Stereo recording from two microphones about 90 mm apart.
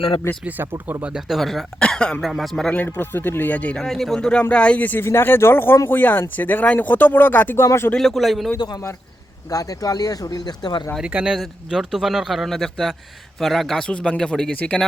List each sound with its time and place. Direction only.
0.4 s speech: 25° right (ahead or behind)
1.0 s speech: 10° right (ahead or behind)
1.4 s a man's voice: 5° left (ahead or behind)
2.7 s a man's voice: 20° left (ahead or behind)
7.9 s speech: centre (ahead or behind)
8.5 s speech: 50° left (ahead or behind)
11.0 s a man's voice: 10° right (ahead or behind); by 14.8 s 10° left (ahead or behind)